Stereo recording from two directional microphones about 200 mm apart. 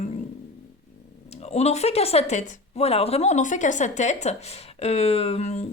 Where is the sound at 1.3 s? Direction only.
35° left (ahead or behind).